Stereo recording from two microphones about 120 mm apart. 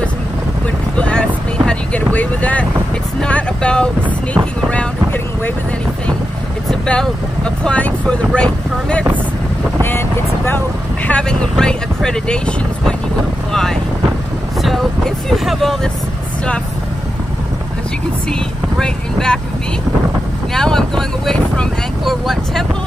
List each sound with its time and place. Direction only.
0.9 s vehicle: 10° left (ahead or behind)
2.1 s speech: 10° left (ahead or behind)
6.7 s speech: 5° left (ahead or behind)
9.8 s speech: 20° left (ahead or behind)
11.1 s speech: 10° left (ahead or behind)
18.3 s speech: 5° left (ahead or behind)
20.5 s speech: 5° left (ahead or behind)